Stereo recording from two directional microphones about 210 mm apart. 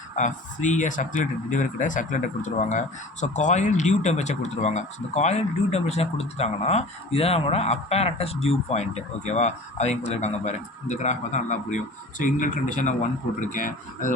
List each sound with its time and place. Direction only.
0.2 s speech: 35° left (ahead or behind)